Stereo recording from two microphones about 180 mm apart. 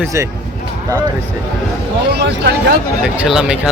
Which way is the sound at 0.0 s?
15° right (ahead or behind).